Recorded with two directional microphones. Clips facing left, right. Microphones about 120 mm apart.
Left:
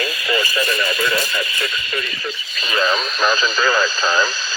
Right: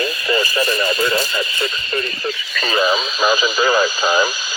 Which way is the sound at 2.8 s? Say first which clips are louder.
Right 1 dB; 5° right (ahead or behind).